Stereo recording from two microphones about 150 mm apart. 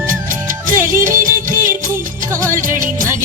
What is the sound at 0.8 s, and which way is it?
Music, 65° right (ahead or behind).